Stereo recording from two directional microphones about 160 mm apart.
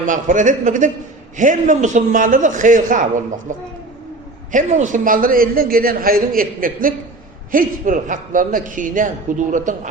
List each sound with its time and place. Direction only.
0.0 s a man's voice: 50° right (ahead or behind)